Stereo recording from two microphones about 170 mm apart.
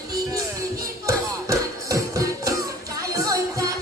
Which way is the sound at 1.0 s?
20° right (ahead or behind).